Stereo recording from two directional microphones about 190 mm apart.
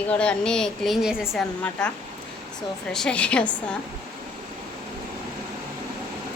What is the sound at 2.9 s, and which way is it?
Speech, 5° left (ahead or behind).